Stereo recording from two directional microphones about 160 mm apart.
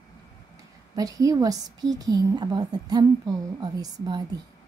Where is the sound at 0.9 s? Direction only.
25° right (ahead or behind).